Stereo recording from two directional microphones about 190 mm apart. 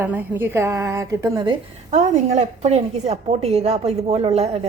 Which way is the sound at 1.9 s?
40° right (ahead or behind).